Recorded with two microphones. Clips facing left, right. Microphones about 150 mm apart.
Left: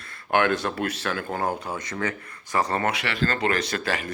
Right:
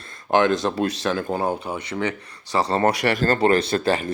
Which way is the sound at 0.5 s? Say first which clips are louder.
Right 4 dB; 15° right (ahead or behind).